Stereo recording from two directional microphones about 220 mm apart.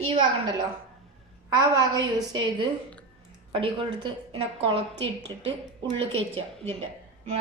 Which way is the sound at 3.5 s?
25° right (ahead or behind).